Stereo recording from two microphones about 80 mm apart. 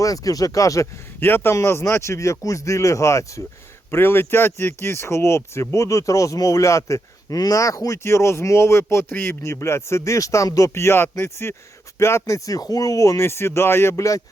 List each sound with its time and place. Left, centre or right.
0.0 s speech: left
1.2 s speech: left
3.9 s speech: left
10.8 s speech: left
13.2 s speech: left